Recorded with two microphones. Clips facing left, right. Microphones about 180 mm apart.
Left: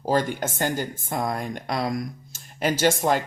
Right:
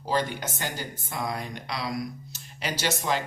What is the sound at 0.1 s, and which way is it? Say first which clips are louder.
Speech: left 4 dB; 50° left (ahead or behind).